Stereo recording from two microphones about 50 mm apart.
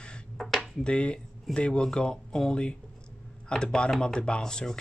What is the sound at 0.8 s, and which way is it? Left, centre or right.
Speech, left.